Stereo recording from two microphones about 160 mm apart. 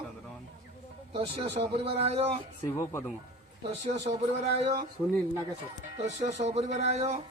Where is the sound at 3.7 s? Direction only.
45° right (ahead or behind).